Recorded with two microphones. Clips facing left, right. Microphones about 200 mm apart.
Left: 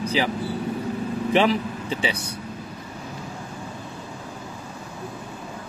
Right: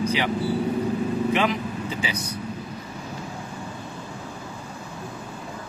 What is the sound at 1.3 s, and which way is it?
Speech, 30° left (ahead or behind).